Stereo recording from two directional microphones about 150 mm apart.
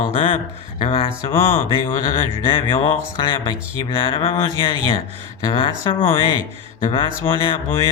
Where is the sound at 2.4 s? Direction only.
35° left (ahead or behind).